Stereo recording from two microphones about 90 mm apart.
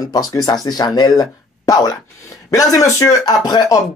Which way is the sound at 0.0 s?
40° left (ahead or behind).